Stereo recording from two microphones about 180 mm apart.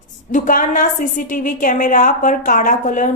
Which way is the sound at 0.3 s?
45° left (ahead or behind).